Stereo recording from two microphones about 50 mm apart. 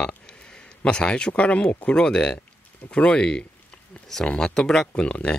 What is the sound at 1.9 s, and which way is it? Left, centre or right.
Speech, centre.